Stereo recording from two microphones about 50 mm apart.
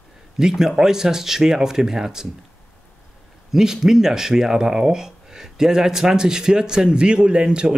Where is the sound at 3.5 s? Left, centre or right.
Centre.